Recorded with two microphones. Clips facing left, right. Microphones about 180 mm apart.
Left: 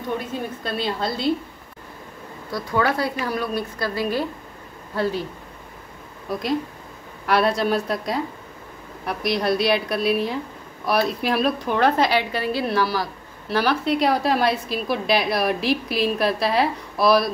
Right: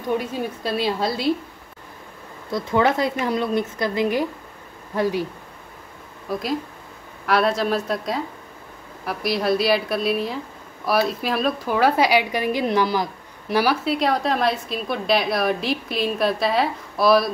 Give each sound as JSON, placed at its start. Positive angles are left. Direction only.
{"t": 0.7, "sound": "a woman's voice", "side_deg": -5}
{"t": 2.5, "sound": "a woman's voice", "side_deg": -20}
{"t": 7.2, "sound": "a woman's voice", "side_deg": 0}
{"t": 13.9, "sound": "a woman's voice", "side_deg": 0}